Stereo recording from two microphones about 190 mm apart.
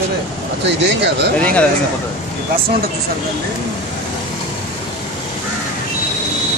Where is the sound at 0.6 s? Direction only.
65° right (ahead or behind).